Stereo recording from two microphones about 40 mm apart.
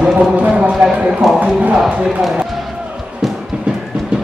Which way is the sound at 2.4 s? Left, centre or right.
Centre.